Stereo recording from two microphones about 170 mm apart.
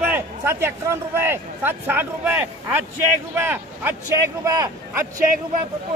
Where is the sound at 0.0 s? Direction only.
10° right (ahead or behind).